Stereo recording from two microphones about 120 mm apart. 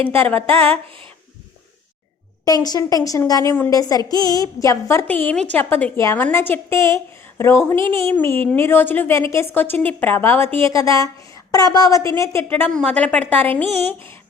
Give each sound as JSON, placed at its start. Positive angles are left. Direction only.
{"t": 0.1, "sound": "a woman's voice", "side_deg": 15}
{"t": 2.4, "sound": "a woman's voice", "side_deg": 30}
{"t": 5.0, "sound": "a woman's voice", "side_deg": 15}